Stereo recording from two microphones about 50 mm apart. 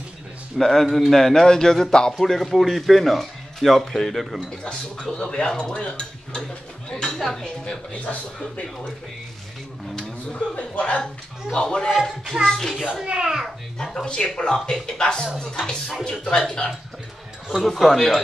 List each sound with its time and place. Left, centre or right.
0.6 s a man's voice: centre
4.6 s dishes: centre
6.9 s a woman's voice: centre
7.4 s a man's voice: centre
10.3 s a man's voice: left
11.5 s dishes: centre
11.9 s a man's voice: centre
12.4 s dishes: centre
13.0 s a child's voice: centre
13.9 s dishes: centre
17.6 s a man's voice: centre